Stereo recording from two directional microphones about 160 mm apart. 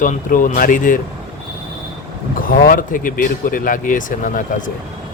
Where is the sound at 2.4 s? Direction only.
65° left (ahead or behind).